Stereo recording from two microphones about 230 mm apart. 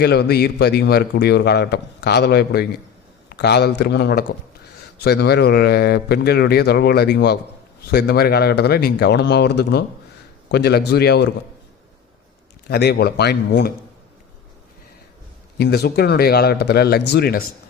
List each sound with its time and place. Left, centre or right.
0.0 s speech: left
12.6 s speech: left
15.5 s speech: left